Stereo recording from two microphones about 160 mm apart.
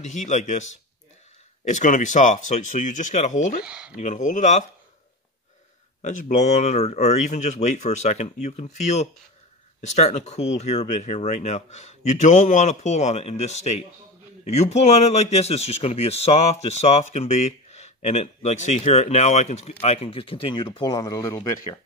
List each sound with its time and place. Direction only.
0.0 s speech: 45° left (ahead or behind)
3.6 s speech: 5° right (ahead or behind)
3.9 s speech: 50° left (ahead or behind)
6.0 s speech: 50° left (ahead or behind); by 21.5 s 25° left (ahead or behind)